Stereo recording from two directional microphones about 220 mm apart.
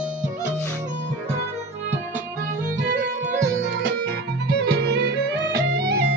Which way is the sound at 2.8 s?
55° right (ahead or behind).